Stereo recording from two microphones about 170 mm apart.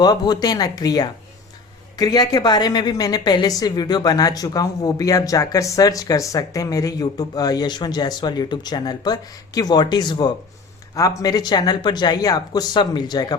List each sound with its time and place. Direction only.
0.0 s a woman's voice: 25° left (ahead or behind)